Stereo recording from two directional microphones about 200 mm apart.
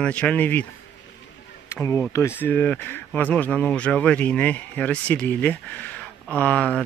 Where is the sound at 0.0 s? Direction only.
5° left (ahead or behind).